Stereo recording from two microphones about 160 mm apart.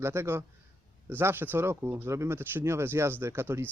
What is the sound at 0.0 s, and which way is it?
Speech, 15° right (ahead or behind).